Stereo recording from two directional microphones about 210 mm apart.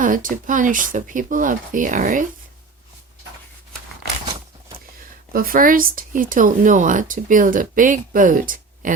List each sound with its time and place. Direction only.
0.0 s speech: 40° right (ahead or behind)
5.3 s speech: 45° right (ahead or behind)